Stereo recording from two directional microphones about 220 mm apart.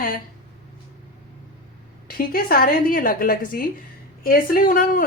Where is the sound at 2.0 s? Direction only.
40° left (ahead or behind).